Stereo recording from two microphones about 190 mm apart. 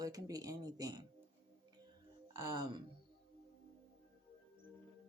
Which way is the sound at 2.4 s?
20° right (ahead or behind).